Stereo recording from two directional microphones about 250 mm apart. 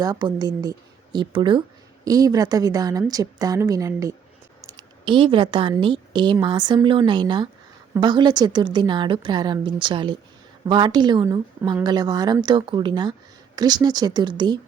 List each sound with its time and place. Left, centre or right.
0.0 s a woman's voice: centre